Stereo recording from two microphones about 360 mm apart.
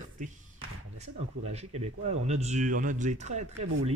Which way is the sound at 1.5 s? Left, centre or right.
Centre.